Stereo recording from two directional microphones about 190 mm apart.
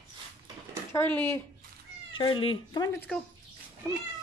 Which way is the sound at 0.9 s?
10° left (ahead or behind).